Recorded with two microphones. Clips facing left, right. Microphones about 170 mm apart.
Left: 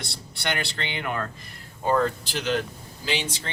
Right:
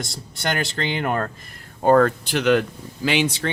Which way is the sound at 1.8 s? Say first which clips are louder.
Right 7 dB; 60° right (ahead or behind).